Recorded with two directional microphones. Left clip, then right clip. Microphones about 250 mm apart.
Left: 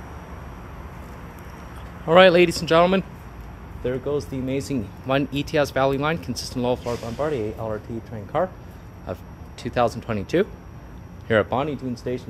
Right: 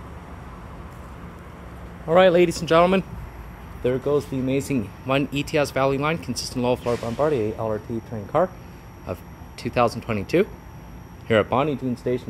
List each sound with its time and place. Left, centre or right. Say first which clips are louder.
2.0 s speech: left 2 dB; centre
3.8 s speech: right 3 dB; right
5.0 s speech: left 1 dB; centre
6.8 s speech: right 4 dB; right
9.0 s speech: even; centre